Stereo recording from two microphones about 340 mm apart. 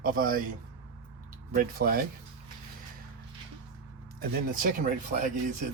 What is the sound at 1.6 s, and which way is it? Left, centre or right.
Speech, right.